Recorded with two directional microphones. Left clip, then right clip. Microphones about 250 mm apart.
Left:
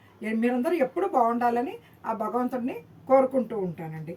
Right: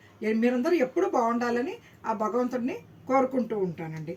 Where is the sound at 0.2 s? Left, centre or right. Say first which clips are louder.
Right 1 dB; centre.